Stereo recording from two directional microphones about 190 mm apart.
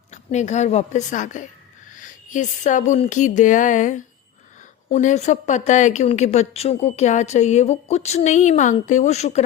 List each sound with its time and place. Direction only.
0.1 s speech: 40° left (ahead or behind)